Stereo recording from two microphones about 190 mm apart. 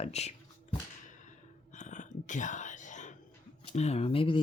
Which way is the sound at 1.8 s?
40° left (ahead or behind).